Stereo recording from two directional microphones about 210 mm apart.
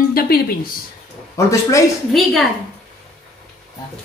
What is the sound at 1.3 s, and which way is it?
Speech, 15° left (ahead or behind).